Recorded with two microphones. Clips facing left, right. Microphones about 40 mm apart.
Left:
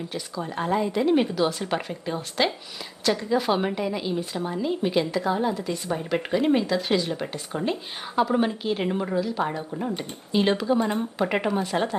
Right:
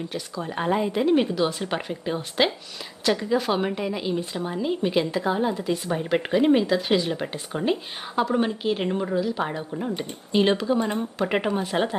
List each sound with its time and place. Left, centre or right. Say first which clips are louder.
0.1 s speech: even; centre
0.5 s a woman's voice: right 1 dB; centre
1.0 s a woman's voice: right 1 dB; centre
3.3 s a woman's voice: even; centre
11.3 s a woman's voice: right 2 dB; centre
11.6 s a woman's voice: right 1 dB; right